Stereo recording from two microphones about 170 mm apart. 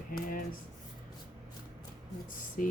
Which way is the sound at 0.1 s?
55° left (ahead or behind).